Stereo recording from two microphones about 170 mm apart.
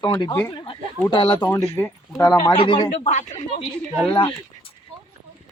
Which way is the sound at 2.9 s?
45° left (ahead or behind).